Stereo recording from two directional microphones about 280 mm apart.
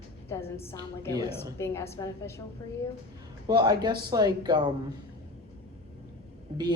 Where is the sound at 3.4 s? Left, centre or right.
Centre.